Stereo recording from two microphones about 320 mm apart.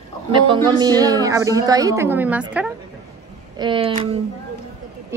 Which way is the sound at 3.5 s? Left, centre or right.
Centre.